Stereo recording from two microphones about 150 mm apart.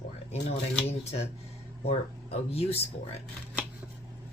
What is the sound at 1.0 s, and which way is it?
Speech, 45° left (ahead or behind).